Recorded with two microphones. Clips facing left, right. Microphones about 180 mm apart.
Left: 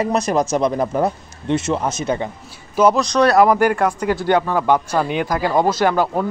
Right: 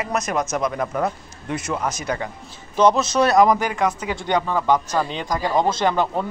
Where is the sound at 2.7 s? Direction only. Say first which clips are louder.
Left 2 dB; 5° left (ahead or behind).